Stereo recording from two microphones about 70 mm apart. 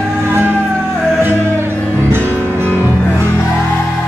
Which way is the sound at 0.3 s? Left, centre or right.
Right.